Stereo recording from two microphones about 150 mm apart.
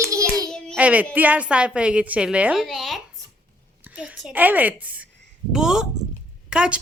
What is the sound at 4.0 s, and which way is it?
A woman's voice, 10° right (ahead or behind).